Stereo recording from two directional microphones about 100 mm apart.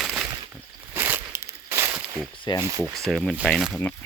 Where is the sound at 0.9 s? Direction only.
25° right (ahead or behind).